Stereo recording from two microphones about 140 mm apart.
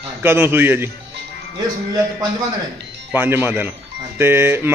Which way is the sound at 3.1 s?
15° right (ahead or behind).